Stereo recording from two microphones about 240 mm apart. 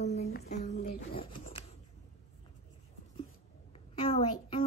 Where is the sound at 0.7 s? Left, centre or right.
Left.